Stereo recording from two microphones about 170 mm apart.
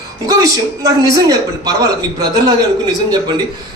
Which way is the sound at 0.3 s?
20° right (ahead or behind).